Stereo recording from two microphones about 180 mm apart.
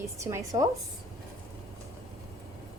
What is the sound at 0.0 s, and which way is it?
Speech, 15° right (ahead or behind).